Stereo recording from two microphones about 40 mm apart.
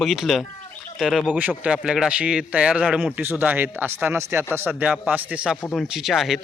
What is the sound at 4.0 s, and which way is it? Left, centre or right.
Speech, right.